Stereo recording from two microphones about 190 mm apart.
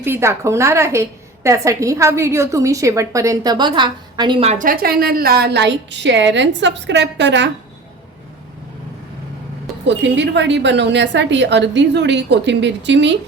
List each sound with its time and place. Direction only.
0.0 s a woman's voice: 15° right (ahead or behind)
4.5 s a woman's voice: 45° right (ahead or behind); by 7.5 s 65° right (ahead or behind)
9.8 s a woman's voice: 70° right (ahead or behind)